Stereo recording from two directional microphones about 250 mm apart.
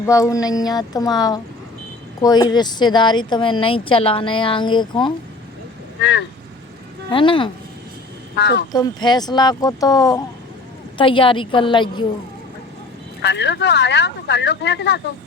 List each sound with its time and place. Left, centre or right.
0.0 s speech: centre
6.0 s speech: left
7.1 s a woman's voice: centre
8.4 s speech: left
8.7 s a woman's voice: centre
13.2 s speech: left